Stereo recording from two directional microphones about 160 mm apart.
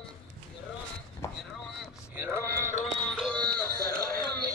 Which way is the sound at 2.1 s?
10° right (ahead or behind).